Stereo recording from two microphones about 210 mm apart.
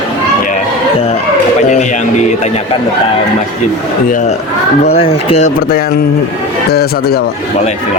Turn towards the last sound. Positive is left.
turn(degrees=50)  # may be behind; listen again after turning